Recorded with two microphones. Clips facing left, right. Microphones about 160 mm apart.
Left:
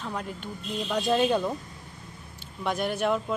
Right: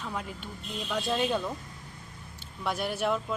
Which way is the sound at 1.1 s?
Centre (ahead or behind).